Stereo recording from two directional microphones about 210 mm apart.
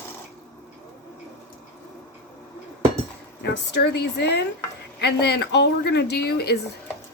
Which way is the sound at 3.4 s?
55° left (ahead or behind).